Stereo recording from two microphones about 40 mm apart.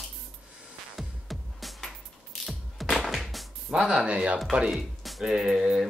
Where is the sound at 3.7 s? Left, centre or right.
Right.